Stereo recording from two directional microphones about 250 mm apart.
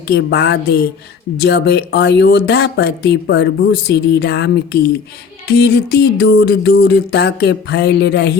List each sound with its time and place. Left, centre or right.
0.1 s speech: left